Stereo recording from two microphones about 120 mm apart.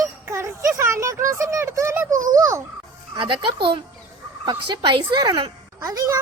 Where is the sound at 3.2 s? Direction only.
45° right (ahead or behind).